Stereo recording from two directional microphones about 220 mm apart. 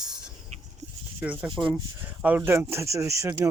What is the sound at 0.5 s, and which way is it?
Goat, 30° right (ahead or behind).